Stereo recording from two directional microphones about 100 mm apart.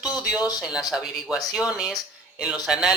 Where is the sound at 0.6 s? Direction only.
5° right (ahead or behind).